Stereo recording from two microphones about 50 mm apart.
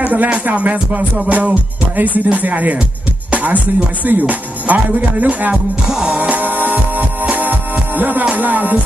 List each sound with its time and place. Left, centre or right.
0.0 s speech: right
3.3 s music: right
4.0 s speech: right
5.9 s music: centre
6.1 s music: right
8.4 s speech: right